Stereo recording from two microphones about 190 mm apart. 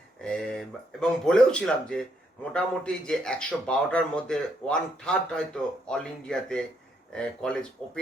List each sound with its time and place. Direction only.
0.2 s speech: 5° left (ahead or behind)